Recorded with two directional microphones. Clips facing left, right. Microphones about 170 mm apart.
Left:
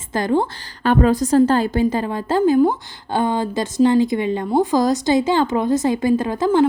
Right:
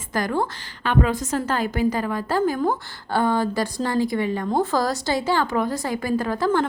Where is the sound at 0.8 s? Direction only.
40° left (ahead or behind).